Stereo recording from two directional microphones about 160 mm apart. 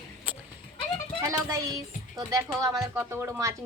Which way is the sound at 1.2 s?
20° right (ahead or behind).